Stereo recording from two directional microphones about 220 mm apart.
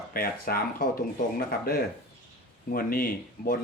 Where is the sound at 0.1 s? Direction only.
40° left (ahead or behind).